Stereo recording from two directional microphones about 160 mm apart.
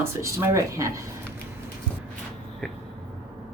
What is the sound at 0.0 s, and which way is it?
Speech, 20° right (ahead or behind).